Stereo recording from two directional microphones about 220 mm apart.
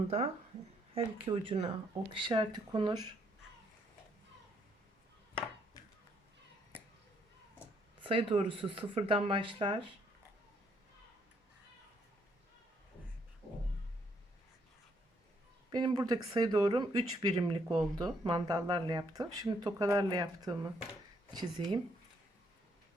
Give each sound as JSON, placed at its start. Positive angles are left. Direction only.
{"t": 0.1, "sound": "speech", "side_deg": -30}
{"t": 8.0, "sound": "speech", "side_deg": -25}
{"t": 15.7, "sound": "speech", "side_deg": -20}